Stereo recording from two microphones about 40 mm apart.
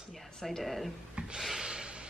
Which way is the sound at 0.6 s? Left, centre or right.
Centre.